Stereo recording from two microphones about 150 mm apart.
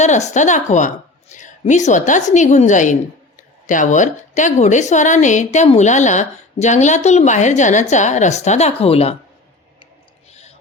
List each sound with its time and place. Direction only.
0.0 s a woman's voice: 50° left (ahead or behind)